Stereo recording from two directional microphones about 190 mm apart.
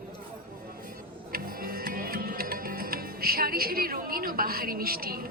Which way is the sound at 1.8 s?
50° right (ahead or behind).